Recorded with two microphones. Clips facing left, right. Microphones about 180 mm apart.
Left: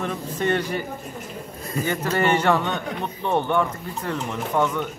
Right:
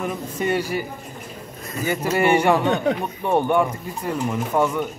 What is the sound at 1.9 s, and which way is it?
Speech, 10° right (ahead or behind).